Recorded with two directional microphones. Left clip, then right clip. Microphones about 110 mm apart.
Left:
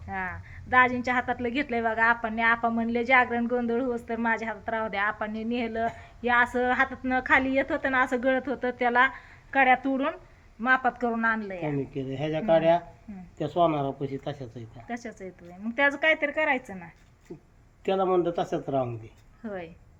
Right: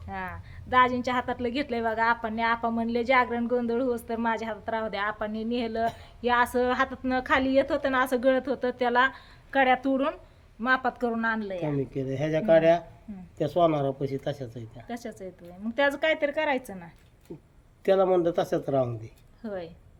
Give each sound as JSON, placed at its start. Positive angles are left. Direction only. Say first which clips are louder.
{"t": 0.1, "sound": "a woman's voice", "louder": "left 3 dB", "side_deg": 5}
{"t": 11.8, "sound": "speech", "louder": "right 2 dB", "side_deg": -50}
{"t": 14.8, "sound": "a woman's voice", "louder": "left 1 dB", "side_deg": 5}
{"t": 17.8, "sound": "speech", "louder": "right 3 dB", "side_deg": -50}
{"t": 19.4, "sound": "a woman's voice", "louder": "right 1 dB", "side_deg": 0}